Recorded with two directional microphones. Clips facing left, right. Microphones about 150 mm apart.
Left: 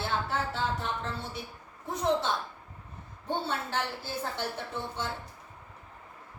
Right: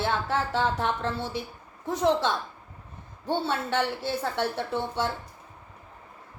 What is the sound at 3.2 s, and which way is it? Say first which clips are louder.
A woman's voice: right 5 dB; 75° right (ahead or behind).